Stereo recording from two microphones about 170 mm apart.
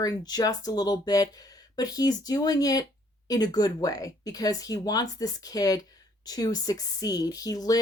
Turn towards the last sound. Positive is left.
turn(degrees=20)  # may be behind; listen again after turning